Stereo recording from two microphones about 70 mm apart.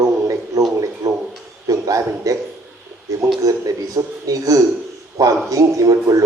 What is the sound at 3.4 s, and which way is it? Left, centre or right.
A man's voice, right.